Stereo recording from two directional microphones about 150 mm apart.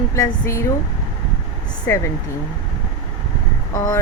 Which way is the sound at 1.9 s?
20° left (ahead or behind).